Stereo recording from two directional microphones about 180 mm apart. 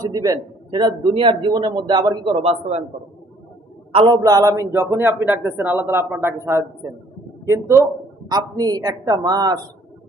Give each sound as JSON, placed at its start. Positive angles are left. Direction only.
{"t": 0.0, "sound": "a man's voice", "side_deg": -20}
{"t": 3.9, "sound": "a man's voice", "side_deg": -25}